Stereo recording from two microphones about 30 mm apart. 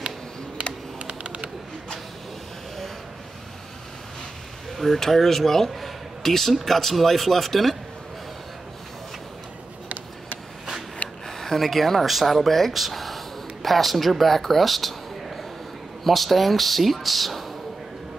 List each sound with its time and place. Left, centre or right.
1.2 s bird: right
4.6 s speech: centre
5.7 s a sound: centre
6.6 s a man's voice: centre
11.2 s a sound: centre
11.6 s a man's voice: centre